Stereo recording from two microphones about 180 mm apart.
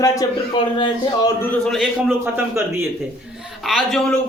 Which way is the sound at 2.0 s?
10° right (ahead or behind).